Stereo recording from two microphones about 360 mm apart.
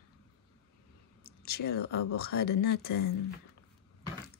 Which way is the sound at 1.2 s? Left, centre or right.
Left.